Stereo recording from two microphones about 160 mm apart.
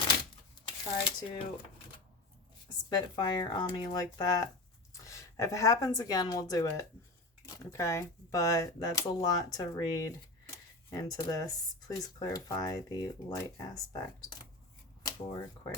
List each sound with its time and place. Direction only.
0.6 s speech: 30° left (ahead or behind)
3.2 s a woman's voice: 25° left (ahead or behind)
15.0 s a sound: 25° left (ahead or behind)